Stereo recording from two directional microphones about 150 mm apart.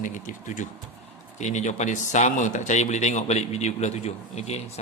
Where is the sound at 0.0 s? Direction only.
60° left (ahead or behind).